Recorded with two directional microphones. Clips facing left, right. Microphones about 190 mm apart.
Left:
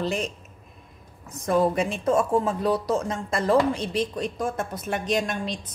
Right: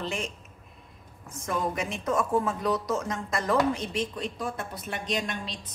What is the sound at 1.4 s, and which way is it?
Speech, 35° left (ahead or behind).